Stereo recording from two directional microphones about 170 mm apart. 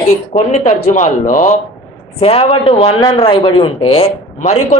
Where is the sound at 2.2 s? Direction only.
35° left (ahead or behind).